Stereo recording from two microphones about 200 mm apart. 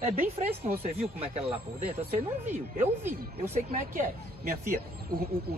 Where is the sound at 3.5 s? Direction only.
40° right (ahead or behind).